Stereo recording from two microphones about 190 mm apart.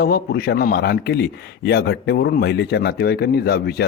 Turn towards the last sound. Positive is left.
turn(degrees=55)  # may be behind; listen again after turning